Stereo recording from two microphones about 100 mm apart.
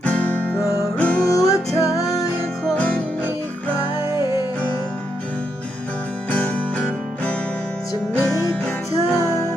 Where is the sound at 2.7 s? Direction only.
15° left (ahead or behind).